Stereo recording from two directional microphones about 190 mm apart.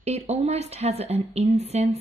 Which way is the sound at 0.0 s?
35° right (ahead or behind).